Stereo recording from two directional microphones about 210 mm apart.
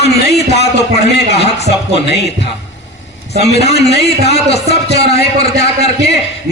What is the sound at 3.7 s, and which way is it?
Speech, 50° left (ahead or behind).